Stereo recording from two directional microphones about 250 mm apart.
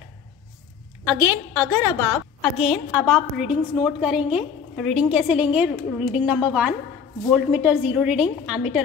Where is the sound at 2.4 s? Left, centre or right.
Centre.